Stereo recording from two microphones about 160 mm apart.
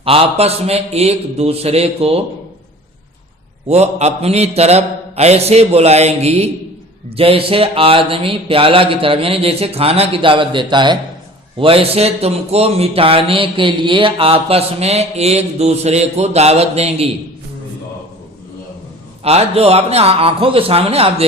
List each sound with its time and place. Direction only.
0.0 s speech: 35° right (ahead or behind)
3.7 s speech: 40° right (ahead or behind)
19.2 s speech: 40° right (ahead or behind)